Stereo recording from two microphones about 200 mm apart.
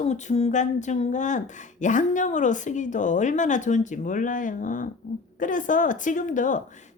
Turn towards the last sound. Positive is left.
turn(degrees=40)  # may be behind; listen again after turning